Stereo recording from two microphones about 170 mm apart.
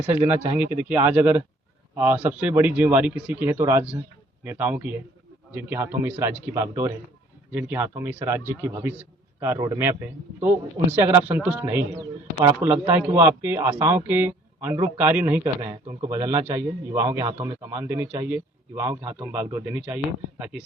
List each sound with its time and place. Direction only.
0.3 s speech: 10° right (ahead or behind)
10.9 s speech: 10° right (ahead or behind)